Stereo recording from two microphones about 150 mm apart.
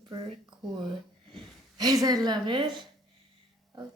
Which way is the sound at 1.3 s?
25° right (ahead or behind).